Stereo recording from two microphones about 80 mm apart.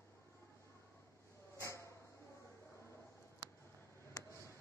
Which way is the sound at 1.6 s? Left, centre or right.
Left.